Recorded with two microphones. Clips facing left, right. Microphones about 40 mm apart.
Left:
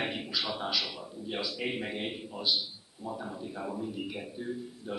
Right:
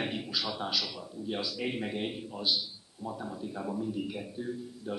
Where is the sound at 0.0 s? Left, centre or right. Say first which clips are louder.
Even; centre.